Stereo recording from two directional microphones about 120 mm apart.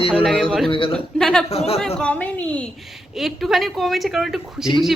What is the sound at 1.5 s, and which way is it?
Speech, 55° left (ahead or behind).